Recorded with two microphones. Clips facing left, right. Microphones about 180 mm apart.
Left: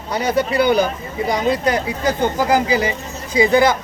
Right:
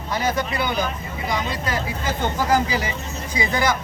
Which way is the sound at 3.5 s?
25° left (ahead or behind).